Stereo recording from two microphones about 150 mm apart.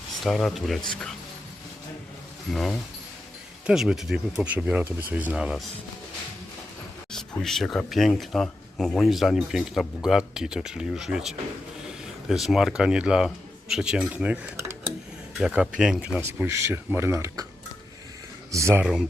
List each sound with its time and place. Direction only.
0.2 s speech: centre (ahead or behind)
2.5 s speech: centre (ahead or behind)
7.1 s speech: 5° left (ahead or behind)
15.4 s speech: centre (ahead or behind)
16.2 s speech: 15° right (ahead or behind)
18.5 s speech: 15° right (ahead or behind)